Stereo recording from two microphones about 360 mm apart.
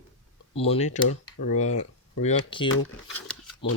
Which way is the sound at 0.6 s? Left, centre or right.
Centre.